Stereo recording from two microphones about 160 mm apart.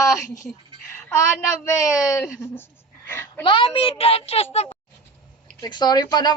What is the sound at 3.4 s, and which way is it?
A woman's voice, 30° left (ahead or behind).